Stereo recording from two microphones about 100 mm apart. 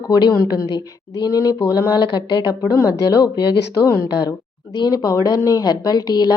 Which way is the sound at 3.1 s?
45° left (ahead or behind).